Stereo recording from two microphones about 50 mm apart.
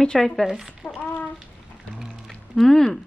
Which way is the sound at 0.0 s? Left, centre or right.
Centre.